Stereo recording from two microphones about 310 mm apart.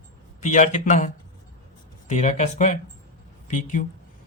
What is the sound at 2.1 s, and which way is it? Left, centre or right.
Speech, left.